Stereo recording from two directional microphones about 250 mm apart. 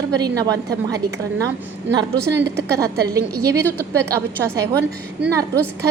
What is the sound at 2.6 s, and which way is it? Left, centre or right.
A woman's voice, centre.